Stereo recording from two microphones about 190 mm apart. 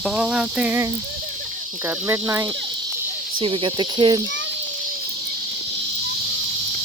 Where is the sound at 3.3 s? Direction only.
25° right (ahead or behind).